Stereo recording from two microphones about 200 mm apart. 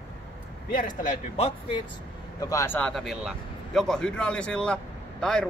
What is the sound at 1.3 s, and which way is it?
Speech, 25° left (ahead or behind).